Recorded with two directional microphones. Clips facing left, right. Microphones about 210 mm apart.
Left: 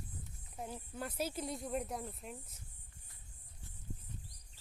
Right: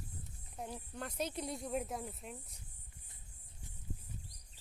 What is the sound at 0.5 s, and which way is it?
Speech, 5° left (ahead or behind).